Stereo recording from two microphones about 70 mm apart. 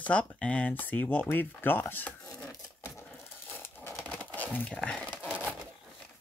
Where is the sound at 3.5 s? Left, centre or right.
Left.